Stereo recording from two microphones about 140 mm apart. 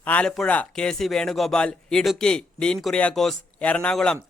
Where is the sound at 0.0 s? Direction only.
10° left (ahead or behind).